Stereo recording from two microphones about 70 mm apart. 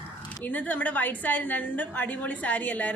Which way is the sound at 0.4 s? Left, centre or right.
Left.